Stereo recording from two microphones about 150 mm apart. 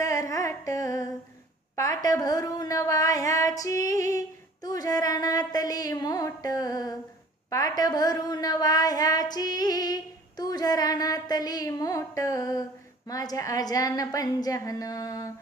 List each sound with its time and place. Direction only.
0.0 s music: 20° left (ahead or behind)
1.7 s speech: 25° left (ahead or behind)